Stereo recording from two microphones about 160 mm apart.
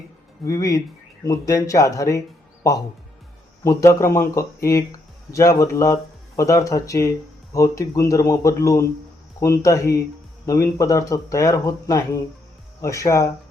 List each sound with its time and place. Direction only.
0.4 s speech: 20° left (ahead or behind)
3.6 s speech: 15° left (ahead or behind)